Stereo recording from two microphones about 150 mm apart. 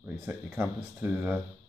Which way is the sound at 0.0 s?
10° right (ahead or behind).